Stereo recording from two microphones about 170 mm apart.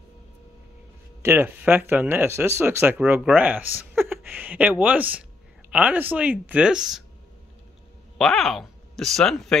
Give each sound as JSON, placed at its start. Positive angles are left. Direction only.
{"t": 1.2, "sound": "speech", "side_deg": -10}
{"t": 8.2, "sound": "speech", "side_deg": 0}